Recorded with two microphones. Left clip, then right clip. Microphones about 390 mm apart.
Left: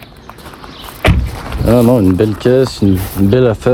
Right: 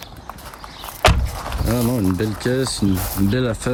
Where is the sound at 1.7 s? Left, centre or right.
Left.